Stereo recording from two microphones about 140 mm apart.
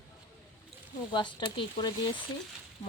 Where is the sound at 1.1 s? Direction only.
35° left (ahead or behind).